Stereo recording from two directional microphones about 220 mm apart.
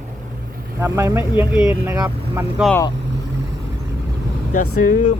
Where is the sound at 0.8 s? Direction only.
10° right (ahead or behind).